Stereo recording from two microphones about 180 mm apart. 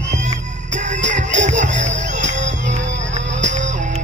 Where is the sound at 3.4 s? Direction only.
40° right (ahead or behind).